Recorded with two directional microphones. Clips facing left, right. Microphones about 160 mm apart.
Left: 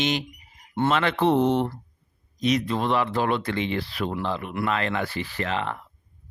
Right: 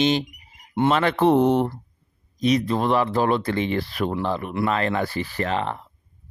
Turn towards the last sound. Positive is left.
turn(degrees=-40)  # may be behind; listen again after turning